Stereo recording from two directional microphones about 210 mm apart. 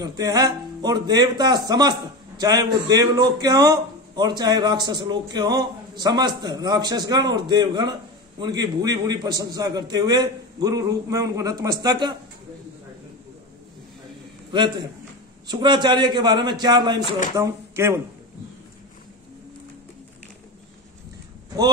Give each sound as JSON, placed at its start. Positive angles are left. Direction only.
{"t": 0.0, "sound": "a man's voice", "side_deg": -20}
{"t": 14.5, "sound": "a man's voice", "side_deg": -20}